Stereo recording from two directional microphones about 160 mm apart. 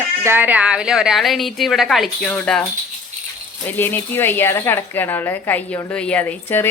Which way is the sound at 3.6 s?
10° left (ahead or behind).